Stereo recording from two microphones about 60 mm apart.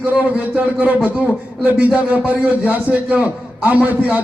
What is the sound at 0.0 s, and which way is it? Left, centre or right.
Speech, right.